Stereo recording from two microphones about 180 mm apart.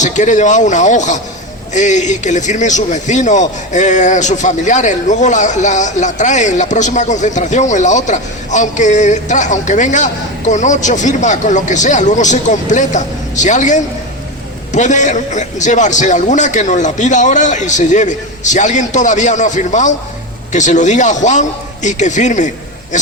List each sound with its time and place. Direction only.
0.0 s a man's voice: 40° left (ahead or behind)